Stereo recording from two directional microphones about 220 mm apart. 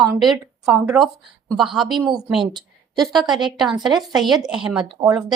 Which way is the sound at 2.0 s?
20° right (ahead or behind).